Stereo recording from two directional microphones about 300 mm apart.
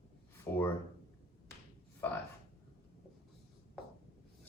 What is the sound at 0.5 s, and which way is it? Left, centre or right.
Speech, centre.